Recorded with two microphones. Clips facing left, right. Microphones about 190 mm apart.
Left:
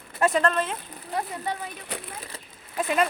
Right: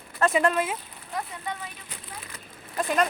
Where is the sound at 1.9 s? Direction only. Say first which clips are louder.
Left 10 dB; 65° left (ahead or behind).